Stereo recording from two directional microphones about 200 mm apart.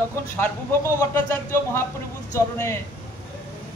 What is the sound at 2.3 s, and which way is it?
Speech, 15° left (ahead or behind).